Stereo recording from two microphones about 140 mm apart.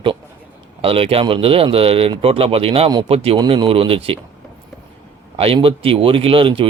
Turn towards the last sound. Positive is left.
turn(degrees=-40)  # may be behind; listen again after turning